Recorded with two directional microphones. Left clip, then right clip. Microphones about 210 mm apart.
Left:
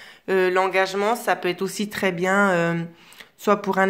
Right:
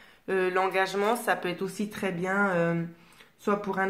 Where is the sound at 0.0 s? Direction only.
40° left (ahead or behind).